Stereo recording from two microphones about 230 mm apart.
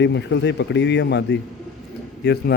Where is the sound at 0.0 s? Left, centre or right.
Left.